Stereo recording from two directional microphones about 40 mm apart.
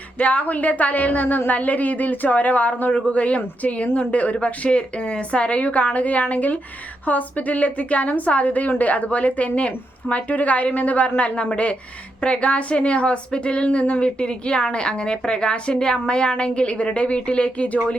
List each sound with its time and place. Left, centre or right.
0.2 s a woman's voice: left